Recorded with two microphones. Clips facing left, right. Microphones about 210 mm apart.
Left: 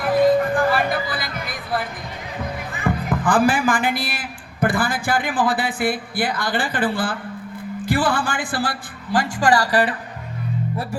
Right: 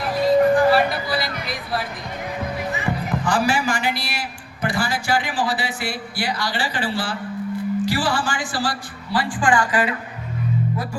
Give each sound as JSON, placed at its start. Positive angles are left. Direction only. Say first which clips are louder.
{"t": 0.0, "sound": "music", "louder": "even", "side_deg": 55}
{"t": 2.7, "sound": "a man's voice", "louder": "left 6 dB", "side_deg": 55}